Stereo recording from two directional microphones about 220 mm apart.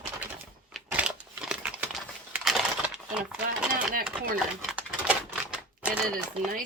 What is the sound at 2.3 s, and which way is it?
Crushing, centre (ahead or behind).